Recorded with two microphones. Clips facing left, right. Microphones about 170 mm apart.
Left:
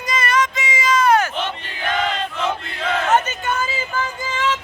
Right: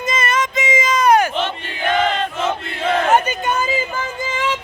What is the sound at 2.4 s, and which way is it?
Battle cry, 30° right (ahead or behind).